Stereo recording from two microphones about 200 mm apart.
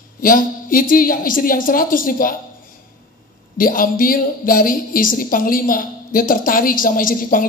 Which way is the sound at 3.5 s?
45° left (ahead or behind).